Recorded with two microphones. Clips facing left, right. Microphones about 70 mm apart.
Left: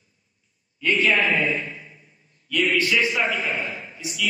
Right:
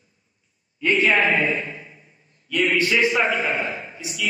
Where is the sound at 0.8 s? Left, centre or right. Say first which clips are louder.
Right 2 dB; right.